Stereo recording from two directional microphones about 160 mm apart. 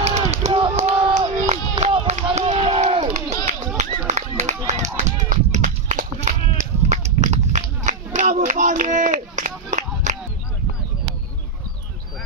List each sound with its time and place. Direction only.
0.0 s run: 45° right (ahead or behind)
0.5 s a sound: 35° right (ahead or behind)
2.2 s run: 45° right (ahead or behind)